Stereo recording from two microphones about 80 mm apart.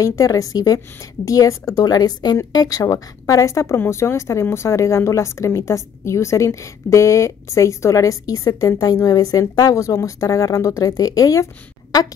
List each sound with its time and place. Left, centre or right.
0.0 s a woman's voice: left